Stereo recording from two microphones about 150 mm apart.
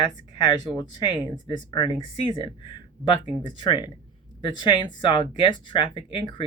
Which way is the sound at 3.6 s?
30° left (ahead or behind).